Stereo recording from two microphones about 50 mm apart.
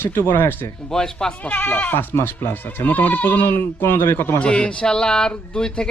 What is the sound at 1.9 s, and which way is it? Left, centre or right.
Speech, left.